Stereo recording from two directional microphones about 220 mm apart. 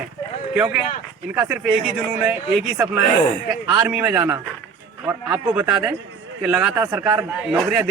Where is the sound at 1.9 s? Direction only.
5° right (ahead or behind).